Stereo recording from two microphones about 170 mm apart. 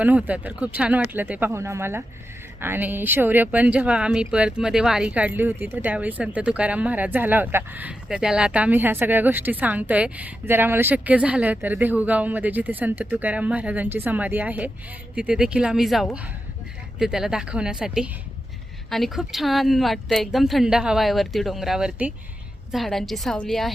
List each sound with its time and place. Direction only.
0.0 s speech: 10° right (ahead or behind)